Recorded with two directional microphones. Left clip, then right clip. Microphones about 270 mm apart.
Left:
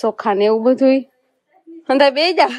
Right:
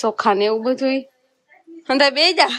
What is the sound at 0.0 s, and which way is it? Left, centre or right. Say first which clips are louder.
Speech: left 1 dB; centre.